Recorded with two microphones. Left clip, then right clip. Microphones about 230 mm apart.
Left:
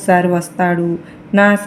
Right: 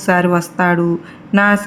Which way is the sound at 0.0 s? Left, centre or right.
Right.